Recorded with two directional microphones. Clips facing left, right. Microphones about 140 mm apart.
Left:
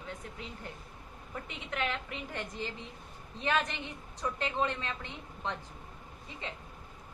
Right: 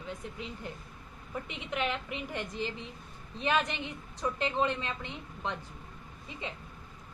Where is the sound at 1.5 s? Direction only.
15° right (ahead or behind).